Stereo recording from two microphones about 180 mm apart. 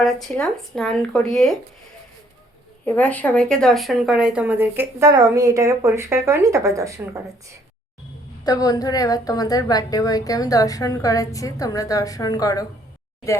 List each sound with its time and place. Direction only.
0.0 s speech: centre (ahead or behind)
2.8 s a woman's voice: 10° left (ahead or behind); by 7.2 s 15° right (ahead or behind)
8.4 s a woman's voice: 20° left (ahead or behind)